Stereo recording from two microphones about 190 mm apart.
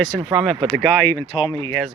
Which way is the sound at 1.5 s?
20° left (ahead or behind).